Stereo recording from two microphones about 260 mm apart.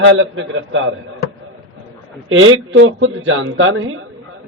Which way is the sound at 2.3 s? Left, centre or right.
Right.